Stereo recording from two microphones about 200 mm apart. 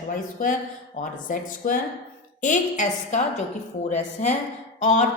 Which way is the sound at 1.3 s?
45° left (ahead or behind).